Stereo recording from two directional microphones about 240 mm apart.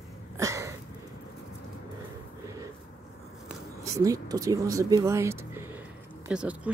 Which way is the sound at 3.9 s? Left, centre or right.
Centre.